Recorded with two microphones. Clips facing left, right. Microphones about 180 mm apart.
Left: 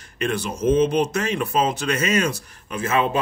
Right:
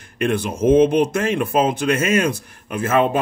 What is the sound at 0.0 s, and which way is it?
A man's voice, 55° right (ahead or behind).